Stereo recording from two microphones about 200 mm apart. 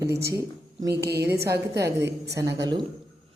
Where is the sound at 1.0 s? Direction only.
55° right (ahead or behind).